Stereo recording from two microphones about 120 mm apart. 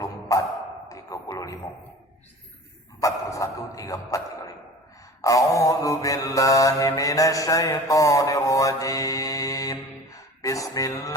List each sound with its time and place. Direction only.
0.3 s bow-wow: 25° left (ahead or behind)
0.9 s a sound: 30° left (ahead or behind)
3.0 s mantra: 25° left (ahead or behind)